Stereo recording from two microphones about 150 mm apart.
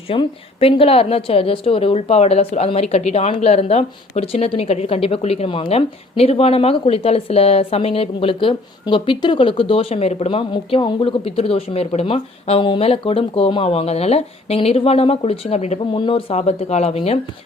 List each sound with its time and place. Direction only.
0.1 s a woman's voice: 40° left (ahead or behind)
15.9 s a woman's voice: 35° left (ahead or behind)